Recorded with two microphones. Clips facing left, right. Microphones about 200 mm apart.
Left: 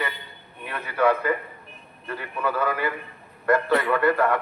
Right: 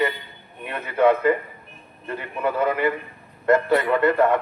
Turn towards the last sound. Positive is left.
turn(degrees=-20)  # may be behind; listen again after turning